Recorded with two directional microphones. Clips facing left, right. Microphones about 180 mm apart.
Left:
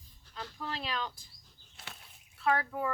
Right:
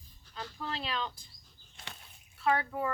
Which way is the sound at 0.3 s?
Centre (ahead or behind).